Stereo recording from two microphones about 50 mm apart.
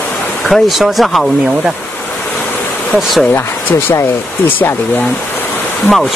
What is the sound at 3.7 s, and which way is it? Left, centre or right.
Speech, left.